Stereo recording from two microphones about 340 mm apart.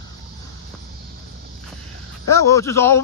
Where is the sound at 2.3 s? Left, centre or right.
Centre.